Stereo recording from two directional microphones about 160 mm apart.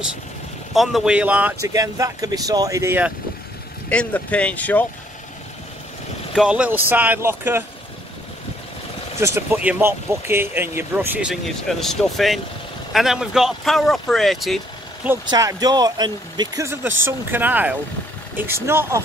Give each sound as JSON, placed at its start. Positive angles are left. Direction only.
{"t": 0.7, "sound": "speech", "side_deg": -5}
{"t": 3.9, "sound": "speech", "side_deg": 10}
{"t": 6.3, "sound": "speech", "side_deg": -5}
{"t": 9.2, "sound": "speech", "side_deg": -15}
{"t": 15.2, "sound": "speech", "side_deg": -25}